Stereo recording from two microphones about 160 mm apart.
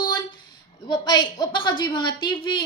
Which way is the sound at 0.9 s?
25° left (ahead or behind).